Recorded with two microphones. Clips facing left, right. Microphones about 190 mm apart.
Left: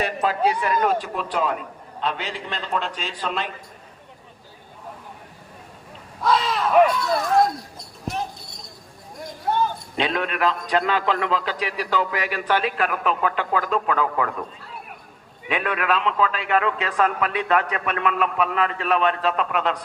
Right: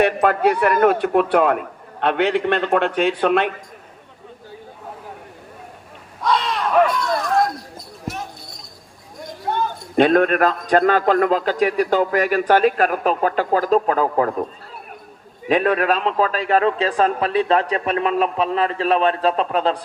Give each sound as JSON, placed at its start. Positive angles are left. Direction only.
{"t": 0.0, "sound": "a man's voice", "side_deg": -60}
{"t": 6.2, "sound": "a sound", "side_deg": 0}
{"t": 9.9, "sound": "a man's voice", "side_deg": -50}
{"t": 15.4, "sound": "a man's voice", "side_deg": -40}